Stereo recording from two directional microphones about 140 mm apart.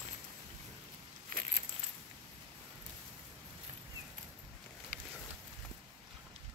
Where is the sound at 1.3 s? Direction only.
90° right.